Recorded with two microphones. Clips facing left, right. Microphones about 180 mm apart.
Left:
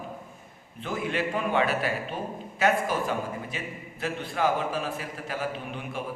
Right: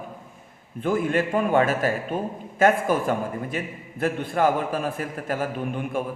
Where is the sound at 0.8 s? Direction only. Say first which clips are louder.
Right 7 dB; 50° right (ahead or behind).